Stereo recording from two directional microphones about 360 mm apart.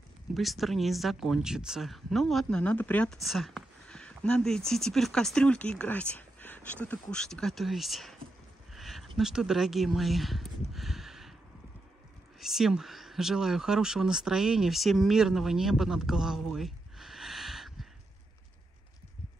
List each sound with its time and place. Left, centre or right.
0.3 s speech: centre
10.7 s a sound: centre
12.4 s speech: centre